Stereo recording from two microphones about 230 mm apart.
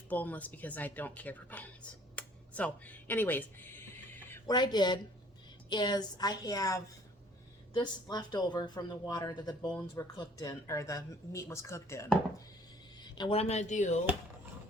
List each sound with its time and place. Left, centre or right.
0.1 s speech: centre
13.1 s speech: left